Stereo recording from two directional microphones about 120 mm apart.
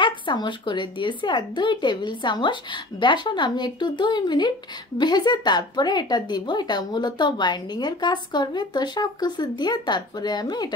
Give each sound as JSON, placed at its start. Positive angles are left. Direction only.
{"t": 0.0, "sound": "a woman's voice", "side_deg": 40}